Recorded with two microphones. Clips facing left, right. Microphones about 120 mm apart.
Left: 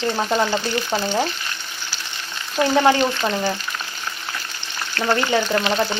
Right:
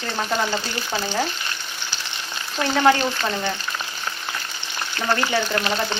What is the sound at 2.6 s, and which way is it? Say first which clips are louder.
Frying: left 2 dB; 15° left (ahead or behind).